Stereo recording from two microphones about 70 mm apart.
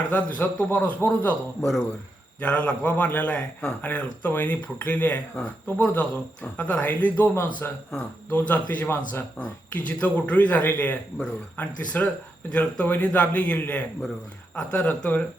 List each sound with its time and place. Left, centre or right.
0.1 s speech: left
2.4 s speech: centre